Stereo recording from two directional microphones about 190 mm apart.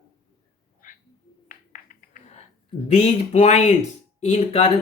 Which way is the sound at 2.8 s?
35° left (ahead or behind).